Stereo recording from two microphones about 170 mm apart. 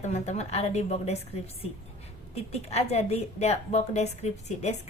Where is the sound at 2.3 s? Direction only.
40° left (ahead or behind).